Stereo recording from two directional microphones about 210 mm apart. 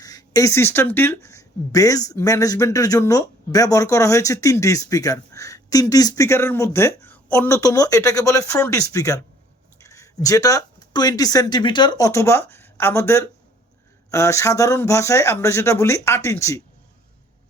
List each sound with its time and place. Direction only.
0.0 s speech: 15° left (ahead or behind)